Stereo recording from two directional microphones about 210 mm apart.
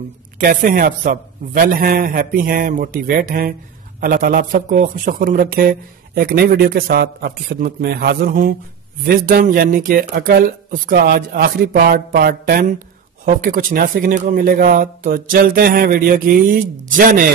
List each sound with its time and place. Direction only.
0.4 s speech: 40° right (ahead or behind)